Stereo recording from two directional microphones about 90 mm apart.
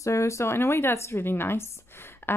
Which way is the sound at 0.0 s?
35° left (ahead or behind).